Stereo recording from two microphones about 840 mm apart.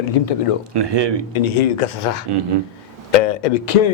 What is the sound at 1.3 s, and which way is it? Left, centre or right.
Speech, left.